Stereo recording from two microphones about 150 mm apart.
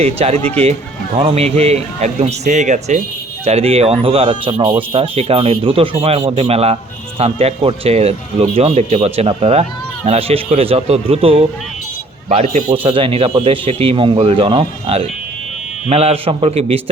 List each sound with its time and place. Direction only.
0.0 s speech: 45° right (ahead or behind)
0.3 s speech: 10° left (ahead or behind)
0.6 s speech: 45° right (ahead or behind)
3.4 s speech: 45° right (ahead or behind)
12.7 s speech: 35° right (ahead or behind)